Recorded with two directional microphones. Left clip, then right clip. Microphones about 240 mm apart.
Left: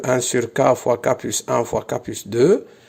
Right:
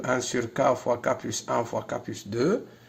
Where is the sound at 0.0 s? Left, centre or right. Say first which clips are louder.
Left 8 dB; left.